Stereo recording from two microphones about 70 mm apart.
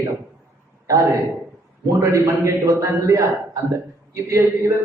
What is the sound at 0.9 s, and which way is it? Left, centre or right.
Speech, right.